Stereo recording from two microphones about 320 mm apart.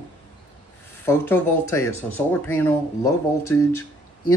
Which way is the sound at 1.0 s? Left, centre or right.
Centre.